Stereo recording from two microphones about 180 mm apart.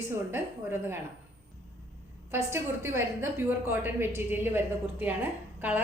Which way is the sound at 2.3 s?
15° right (ahead or behind).